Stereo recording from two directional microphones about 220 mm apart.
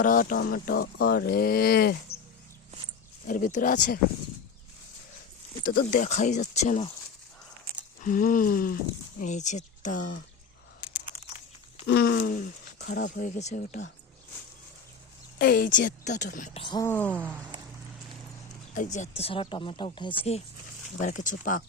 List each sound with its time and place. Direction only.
0.0 s speech: 40° left (ahead or behind)
3.2 s a woman's voice: 35° left (ahead or behind)
5.6 s a woman's voice: 40° left (ahead or behind)
8.0 s a woman's voice: 40° left (ahead or behind)
11.9 s a woman's voice: 50° left (ahead or behind)
15.4 s a woman's voice: 40° left (ahead or behind)
16.6 s speech: 15° left (ahead or behind)
18.7 s a woman's voice: 35° left (ahead or behind)